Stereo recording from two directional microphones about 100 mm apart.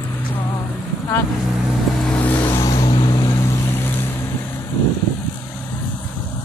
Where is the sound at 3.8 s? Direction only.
20° left (ahead or behind).